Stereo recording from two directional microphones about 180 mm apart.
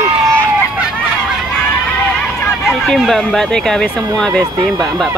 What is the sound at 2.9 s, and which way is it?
Speech, centre (ahead or behind).